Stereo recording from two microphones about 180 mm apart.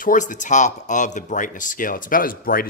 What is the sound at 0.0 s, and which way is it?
A man's voice, 45° left (ahead or behind).